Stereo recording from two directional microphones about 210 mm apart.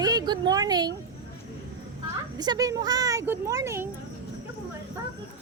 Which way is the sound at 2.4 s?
20° right (ahead or behind).